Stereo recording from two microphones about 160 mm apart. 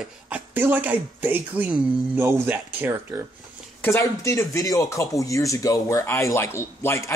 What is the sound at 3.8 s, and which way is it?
Speech, 15° left (ahead or behind).